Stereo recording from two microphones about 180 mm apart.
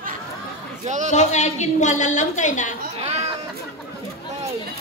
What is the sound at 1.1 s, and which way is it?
A woman's voice, 40° left (ahead or behind).